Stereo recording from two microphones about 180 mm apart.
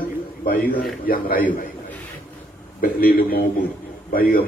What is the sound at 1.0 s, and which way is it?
Speech, 55° left (ahead or behind).